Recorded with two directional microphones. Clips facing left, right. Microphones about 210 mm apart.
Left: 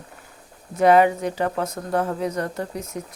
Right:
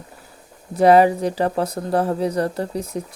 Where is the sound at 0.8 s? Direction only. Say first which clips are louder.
Right 3 dB; 35° right (ahead or behind).